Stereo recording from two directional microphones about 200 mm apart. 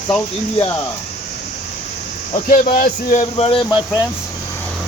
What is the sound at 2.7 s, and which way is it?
Speech, 45° left (ahead or behind).